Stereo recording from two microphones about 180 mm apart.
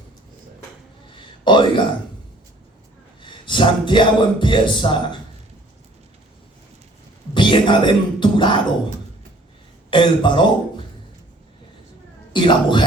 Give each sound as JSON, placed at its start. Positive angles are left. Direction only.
{"t": 1.5, "sound": "speech", "side_deg": 25}
{"t": 3.2, "sound": "speech", "side_deg": 25}
{"t": 7.3, "sound": "music", "side_deg": 25}
{"t": 9.9, "sound": "speech", "side_deg": 25}
{"t": 12.3, "sound": "speech", "side_deg": 25}